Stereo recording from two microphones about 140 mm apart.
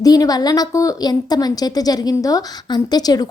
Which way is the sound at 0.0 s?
25° left (ahead or behind).